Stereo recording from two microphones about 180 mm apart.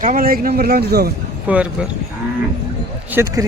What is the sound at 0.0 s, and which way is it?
A man's voice, 50° right (ahead or behind).